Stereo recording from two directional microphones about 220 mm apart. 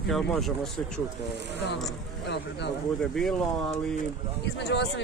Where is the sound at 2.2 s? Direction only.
50° left (ahead or behind).